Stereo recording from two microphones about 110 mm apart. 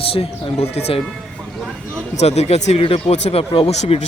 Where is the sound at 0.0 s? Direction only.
60° left (ahead or behind).